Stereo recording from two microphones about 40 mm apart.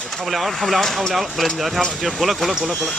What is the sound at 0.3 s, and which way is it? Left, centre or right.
Speech, centre.